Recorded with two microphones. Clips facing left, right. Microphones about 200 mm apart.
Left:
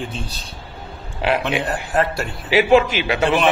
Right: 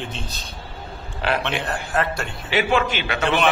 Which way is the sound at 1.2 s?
10° left (ahead or behind).